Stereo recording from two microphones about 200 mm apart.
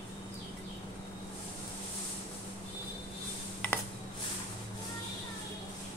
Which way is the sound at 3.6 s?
5° left (ahead or behind).